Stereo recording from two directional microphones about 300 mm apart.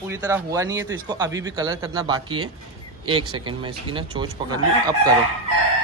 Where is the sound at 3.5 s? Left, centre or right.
Centre.